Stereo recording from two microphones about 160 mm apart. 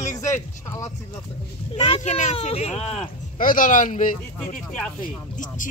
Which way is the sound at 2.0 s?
50° left (ahead or behind).